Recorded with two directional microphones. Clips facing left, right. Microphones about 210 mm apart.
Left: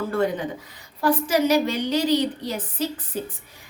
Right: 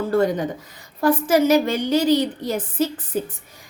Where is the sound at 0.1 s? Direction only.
40° right (ahead or behind).